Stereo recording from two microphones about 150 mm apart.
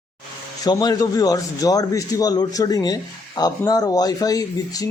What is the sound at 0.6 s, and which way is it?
Speech, 25° left (ahead or behind).